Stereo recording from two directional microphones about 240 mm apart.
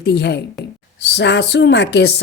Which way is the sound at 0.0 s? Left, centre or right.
Left.